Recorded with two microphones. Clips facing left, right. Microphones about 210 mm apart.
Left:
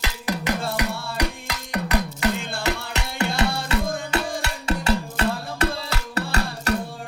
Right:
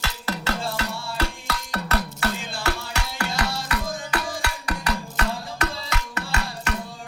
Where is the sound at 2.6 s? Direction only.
20° left (ahead or behind).